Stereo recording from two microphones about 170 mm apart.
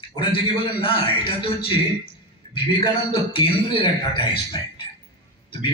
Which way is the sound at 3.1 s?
30° left (ahead or behind).